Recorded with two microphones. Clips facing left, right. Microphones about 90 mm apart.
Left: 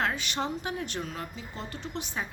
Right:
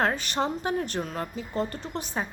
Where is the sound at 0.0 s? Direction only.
40° right (ahead or behind).